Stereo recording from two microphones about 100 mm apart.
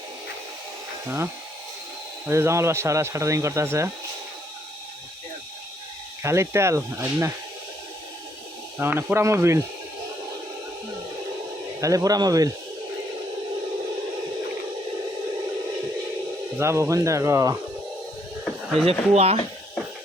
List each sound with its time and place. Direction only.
1.0 s speech: 20° right (ahead or behind)
6.2 s speech: 30° right (ahead or behind)
8.8 s speech: 20° right (ahead or behind)
11.8 s speech: 35° right (ahead or behind)
16.6 s speech: 25° right (ahead or behind)
18.4 s a sound: centre (ahead or behind)
18.9 s speech: 85° right